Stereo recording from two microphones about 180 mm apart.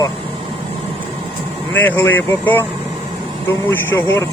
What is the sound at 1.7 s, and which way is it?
Speech, 10° left (ahead or behind).